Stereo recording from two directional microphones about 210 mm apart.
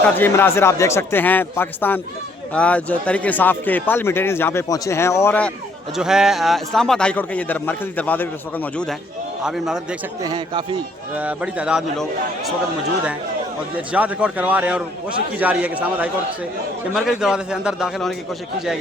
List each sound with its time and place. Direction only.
0.0 s a man's voice: 10° left (ahead or behind)
6.0 s a man's voice: 5° right (ahead or behind)
10.2 s speech: 20° right (ahead or behind)
11.1 s a man's voice: 5° right (ahead or behind)
13.9 s a man's voice: 5° right (ahead or behind)